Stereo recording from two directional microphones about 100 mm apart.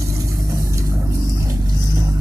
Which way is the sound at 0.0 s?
30° right (ahead or behind).